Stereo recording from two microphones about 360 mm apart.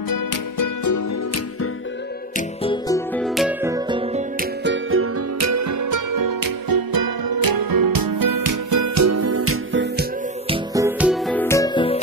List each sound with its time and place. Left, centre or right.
0.1 s music: left
2.6 s music: centre
3.2 s music: centre
5.4 s music: right
10.5 s music: centre